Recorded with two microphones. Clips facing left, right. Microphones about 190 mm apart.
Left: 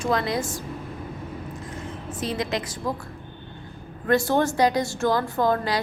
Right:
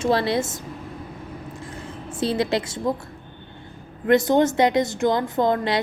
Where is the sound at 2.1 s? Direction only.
30° right (ahead or behind).